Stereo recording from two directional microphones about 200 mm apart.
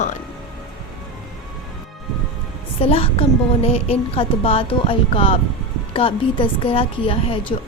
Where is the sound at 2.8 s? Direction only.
30° left (ahead or behind).